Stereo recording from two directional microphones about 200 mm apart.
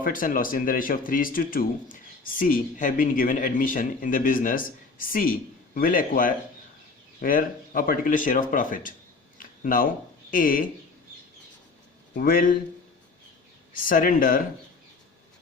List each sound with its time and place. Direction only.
0.0 s speech: 45° left (ahead or behind)
9.4 s a sound: 45° left (ahead or behind)
10.3 s speech: 45° left (ahead or behind)
12.1 s speech: 45° left (ahead or behind)
13.7 s speech: 45° left (ahead or behind)